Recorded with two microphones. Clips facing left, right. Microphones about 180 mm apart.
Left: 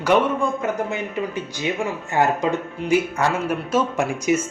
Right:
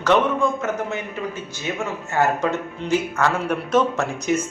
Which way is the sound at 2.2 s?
15° left (ahead or behind).